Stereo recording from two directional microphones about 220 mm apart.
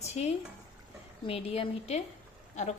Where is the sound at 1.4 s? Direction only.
25° left (ahead or behind).